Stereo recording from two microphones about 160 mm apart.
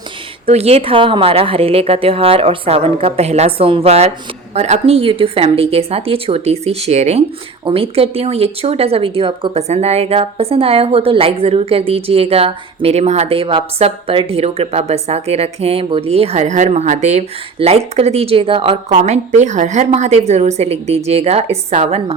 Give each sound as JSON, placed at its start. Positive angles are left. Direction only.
{"t": 0.4, "sound": "a woman's voice", "side_deg": -40}